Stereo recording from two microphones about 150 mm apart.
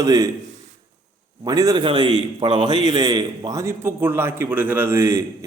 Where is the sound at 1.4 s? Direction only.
25° right (ahead or behind).